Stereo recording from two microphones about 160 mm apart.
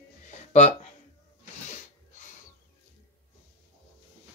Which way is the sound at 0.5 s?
45° left (ahead or behind).